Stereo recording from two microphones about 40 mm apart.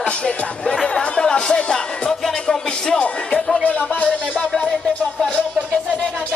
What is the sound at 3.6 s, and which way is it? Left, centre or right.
Music, left.